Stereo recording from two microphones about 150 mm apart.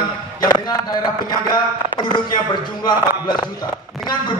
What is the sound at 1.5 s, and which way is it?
Speech, 30° left (ahead or behind).